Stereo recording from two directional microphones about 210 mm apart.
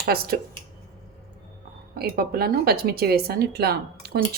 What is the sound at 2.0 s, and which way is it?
A woman's voice, 45° right (ahead or behind).